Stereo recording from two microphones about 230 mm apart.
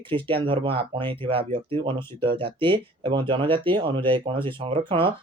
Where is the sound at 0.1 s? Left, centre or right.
Right.